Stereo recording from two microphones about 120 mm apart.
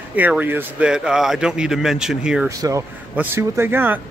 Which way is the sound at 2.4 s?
25° right (ahead or behind).